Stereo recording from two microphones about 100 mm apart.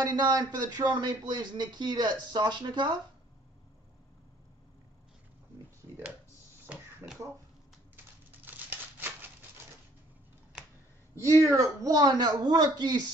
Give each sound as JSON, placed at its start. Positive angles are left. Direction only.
{"t": 0.0, "sound": "speech", "side_deg": -40}
{"t": 6.6, "sound": "a sound", "side_deg": -20}
{"t": 11.1, "sound": "a woman's voice", "side_deg": -30}